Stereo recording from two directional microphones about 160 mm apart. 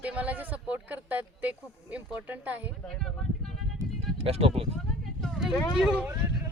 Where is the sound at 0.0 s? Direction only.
10° right (ahead or behind).